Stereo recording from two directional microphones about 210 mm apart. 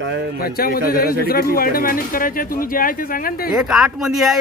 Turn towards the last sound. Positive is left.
turn(degrees=0)  # may be behind; listen again after turning